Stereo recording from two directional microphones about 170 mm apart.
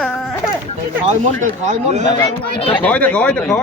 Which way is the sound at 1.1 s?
45° right (ahead or behind).